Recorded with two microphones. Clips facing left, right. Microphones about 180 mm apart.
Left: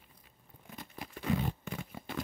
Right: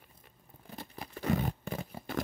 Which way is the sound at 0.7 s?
35° right (ahead or behind).